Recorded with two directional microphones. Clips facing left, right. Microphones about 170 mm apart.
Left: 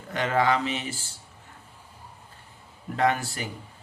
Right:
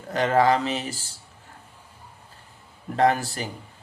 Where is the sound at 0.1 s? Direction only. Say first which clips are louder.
Right 4 dB; 35° right (ahead or behind).